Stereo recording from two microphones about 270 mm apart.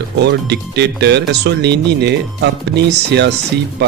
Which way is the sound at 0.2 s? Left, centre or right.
Right.